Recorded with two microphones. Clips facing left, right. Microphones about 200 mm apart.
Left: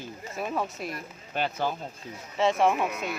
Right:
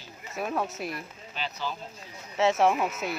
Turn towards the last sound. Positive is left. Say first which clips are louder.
# even
turn(degrees=0)  # may be behind; listen again after turning